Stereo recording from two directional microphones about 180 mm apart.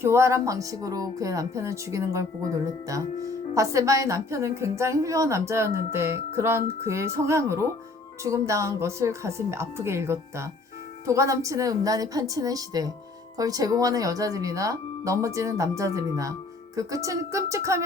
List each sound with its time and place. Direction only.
0.0 s a woman's voice: 15° right (ahead or behind)